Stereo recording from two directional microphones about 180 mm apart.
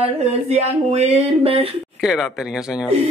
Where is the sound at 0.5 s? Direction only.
35° right (ahead or behind).